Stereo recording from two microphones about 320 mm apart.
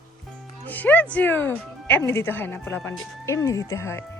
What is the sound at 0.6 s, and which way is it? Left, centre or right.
Speech, centre.